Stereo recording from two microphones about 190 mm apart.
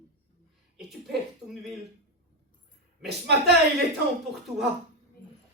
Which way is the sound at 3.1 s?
60° right (ahead or behind).